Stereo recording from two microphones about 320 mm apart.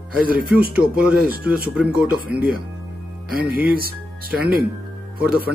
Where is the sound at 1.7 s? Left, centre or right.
Centre.